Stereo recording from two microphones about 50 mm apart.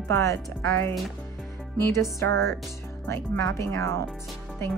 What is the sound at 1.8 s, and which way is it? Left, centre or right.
Speech, left.